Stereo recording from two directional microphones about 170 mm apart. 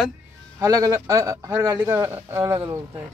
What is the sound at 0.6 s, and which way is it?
Speech, 20° right (ahead or behind).